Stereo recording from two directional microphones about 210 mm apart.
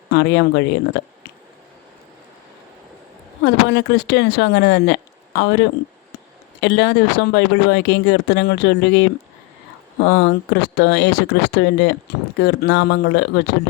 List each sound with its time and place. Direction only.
0.1 s speech: 55° left (ahead or behind)
3.4 s speech: 55° left (ahead or behind)